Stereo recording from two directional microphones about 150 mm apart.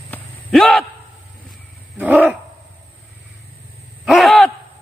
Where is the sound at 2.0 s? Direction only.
10° right (ahead or behind).